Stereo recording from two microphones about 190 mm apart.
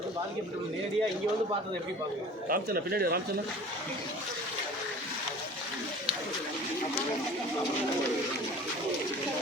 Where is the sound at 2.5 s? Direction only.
50° right (ahead or behind).